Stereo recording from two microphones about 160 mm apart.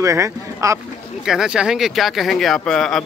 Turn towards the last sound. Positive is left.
turn(degrees=5)  # may be behind; listen again after turning